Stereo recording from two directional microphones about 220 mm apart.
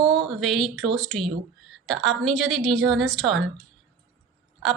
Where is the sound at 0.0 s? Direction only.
20° right (ahead or behind).